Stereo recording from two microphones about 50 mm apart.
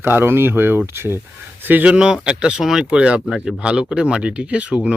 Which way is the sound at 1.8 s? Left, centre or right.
Right.